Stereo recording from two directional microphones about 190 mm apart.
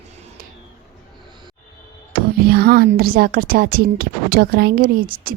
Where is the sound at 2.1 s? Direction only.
55° right (ahead or behind).